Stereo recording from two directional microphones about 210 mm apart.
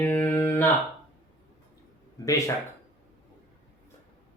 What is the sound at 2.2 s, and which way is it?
Speech, 15° left (ahead or behind).